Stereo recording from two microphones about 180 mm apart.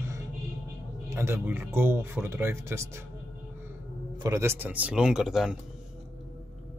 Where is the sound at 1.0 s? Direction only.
15° right (ahead or behind).